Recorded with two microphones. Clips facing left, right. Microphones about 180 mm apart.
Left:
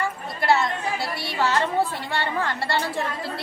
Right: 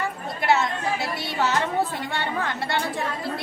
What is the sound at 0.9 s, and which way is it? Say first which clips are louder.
Music: even; 20° right (ahead or behind).